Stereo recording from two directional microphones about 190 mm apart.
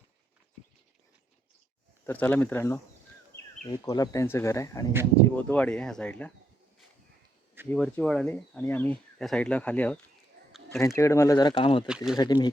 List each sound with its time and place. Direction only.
2.0 s speech: 10° left (ahead or behind)
7.7 s speech: 5° left (ahead or behind); by 11.9 s 30° left (ahead or behind)
11.9 s speech: 5° right (ahead or behind)
12.1 s speech: 20° left (ahead or behind)